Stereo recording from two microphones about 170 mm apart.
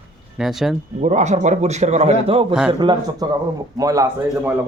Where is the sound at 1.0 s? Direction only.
40° right (ahead or behind); by 4.5 s 20° right (ahead or behind).